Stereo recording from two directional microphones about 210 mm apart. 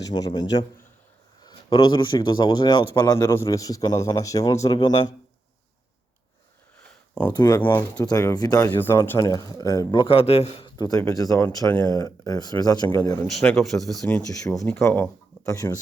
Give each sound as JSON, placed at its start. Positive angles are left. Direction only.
{"t": 0.0, "sound": "speech", "side_deg": 20}
{"t": 7.1, "sound": "speech", "side_deg": 10}
{"t": 7.3, "sound": "speech", "side_deg": 20}
{"t": 13.2, "sound": "speech", "side_deg": 5}
{"t": 14.4, "sound": "speech", "side_deg": 15}